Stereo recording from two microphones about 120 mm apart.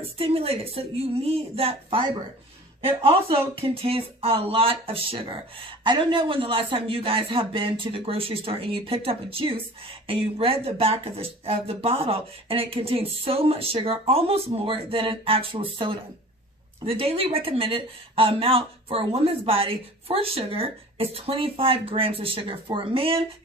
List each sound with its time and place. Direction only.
0.0 s speech: 55° right (ahead or behind)